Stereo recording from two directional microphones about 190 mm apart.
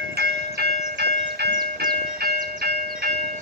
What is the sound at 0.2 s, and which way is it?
Train, 55° right (ahead or behind).